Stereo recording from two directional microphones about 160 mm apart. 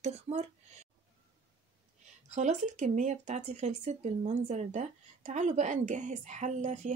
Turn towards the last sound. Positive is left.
turn(degrees=-50)  # may be behind; listen again after turning